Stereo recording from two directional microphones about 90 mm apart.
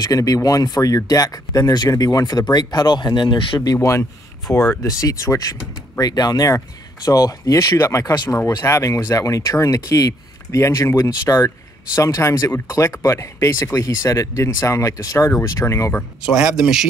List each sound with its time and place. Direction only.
0.0 s speech: 40° left (ahead or behind); by 3.6 s 60° left (ahead or behind)
3.6 s speech: 35° left (ahead or behind)
16.3 s speech: 10° right (ahead or behind)